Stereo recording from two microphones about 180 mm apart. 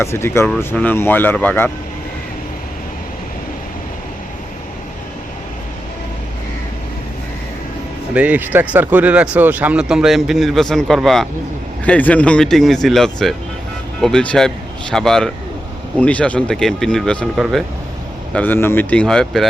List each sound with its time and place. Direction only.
0.0 s speech: 15° left (ahead or behind)
8.1 s speech: 10° right (ahead or behind)
18.3 s speech: 10° left (ahead or behind)